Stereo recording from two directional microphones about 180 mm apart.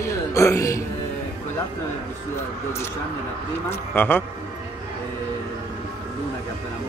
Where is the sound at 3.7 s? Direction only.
10° left (ahead or behind).